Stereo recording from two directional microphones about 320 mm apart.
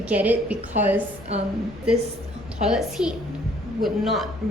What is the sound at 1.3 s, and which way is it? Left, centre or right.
Speech, centre.